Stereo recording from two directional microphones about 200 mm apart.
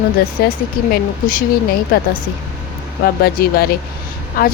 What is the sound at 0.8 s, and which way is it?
Speech, 45° left (ahead or behind).